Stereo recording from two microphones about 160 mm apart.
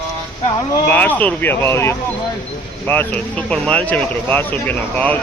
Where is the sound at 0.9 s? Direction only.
10° left (ahead or behind).